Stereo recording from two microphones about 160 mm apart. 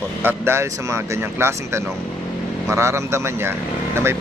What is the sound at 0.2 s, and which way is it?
Speech, 15° right (ahead or behind).